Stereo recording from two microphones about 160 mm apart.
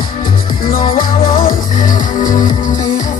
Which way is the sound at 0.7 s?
60° left (ahead or behind).